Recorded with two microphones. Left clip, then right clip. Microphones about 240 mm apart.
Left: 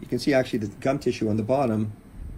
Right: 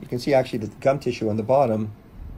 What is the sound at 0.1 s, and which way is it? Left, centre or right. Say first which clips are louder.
Speech: right 2 dB; right.